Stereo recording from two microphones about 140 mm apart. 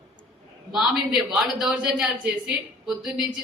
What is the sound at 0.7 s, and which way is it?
A man's voice, centre (ahead or behind).